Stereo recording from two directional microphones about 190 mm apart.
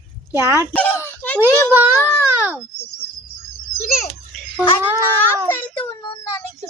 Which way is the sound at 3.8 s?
35° left (ahead or behind).